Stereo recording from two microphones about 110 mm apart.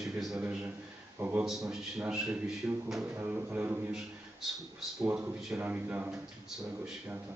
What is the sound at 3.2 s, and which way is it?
Speech, 15° right (ahead or behind).